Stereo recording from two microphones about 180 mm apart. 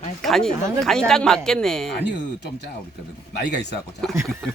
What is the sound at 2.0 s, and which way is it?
Speech, 75° left (ahead or behind).